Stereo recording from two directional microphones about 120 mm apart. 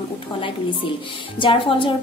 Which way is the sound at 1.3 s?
45° left (ahead or behind).